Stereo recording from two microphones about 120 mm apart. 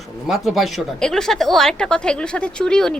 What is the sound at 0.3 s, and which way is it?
Speech, centre (ahead or behind).